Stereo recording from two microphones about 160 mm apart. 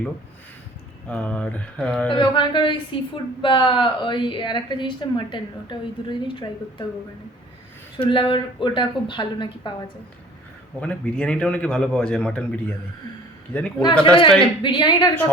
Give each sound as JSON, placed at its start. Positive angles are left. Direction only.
{"t": 1.0, "sound": "a man's voice", "side_deg": 5}
{"t": 2.0, "sound": "a woman's voice", "side_deg": 30}
{"t": 7.9, "sound": "a woman's voice", "side_deg": 35}
{"t": 10.8, "sound": "a man's voice", "side_deg": 10}
{"t": 13.5, "sound": "a man's voice", "side_deg": 5}
{"t": 14.0, "sound": "a woman's voice", "side_deg": 30}